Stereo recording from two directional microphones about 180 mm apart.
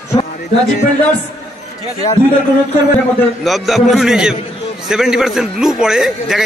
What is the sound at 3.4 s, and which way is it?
A man's voice, centre (ahead or behind).